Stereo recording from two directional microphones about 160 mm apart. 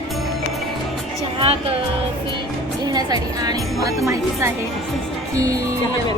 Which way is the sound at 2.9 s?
25° right (ahead or behind).